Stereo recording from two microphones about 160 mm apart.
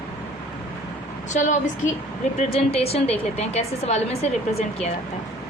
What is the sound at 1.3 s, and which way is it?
Speech, 50° left (ahead or behind).